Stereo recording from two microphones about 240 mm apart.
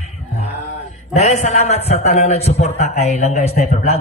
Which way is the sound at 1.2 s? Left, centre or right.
Left.